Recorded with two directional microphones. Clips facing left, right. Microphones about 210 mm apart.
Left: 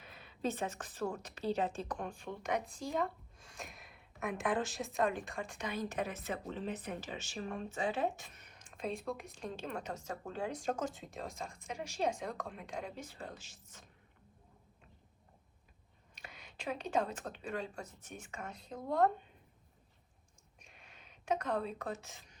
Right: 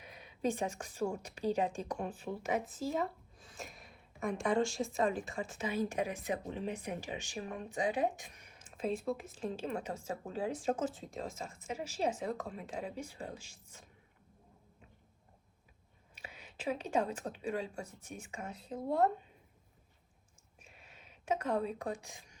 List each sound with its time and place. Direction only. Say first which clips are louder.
0.0 s speech: right 3 dB; 15° right (ahead or behind)
16.1 s speech: right 2 dB; 5° right (ahead or behind)
20.6 s a sound: right 2 dB; 5° right (ahead or behind)